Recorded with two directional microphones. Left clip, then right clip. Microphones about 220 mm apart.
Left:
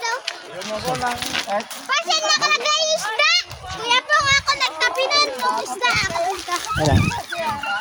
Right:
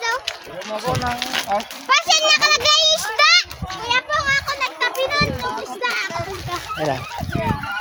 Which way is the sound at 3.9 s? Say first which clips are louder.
Left 2 dB; 40° left (ahead or behind).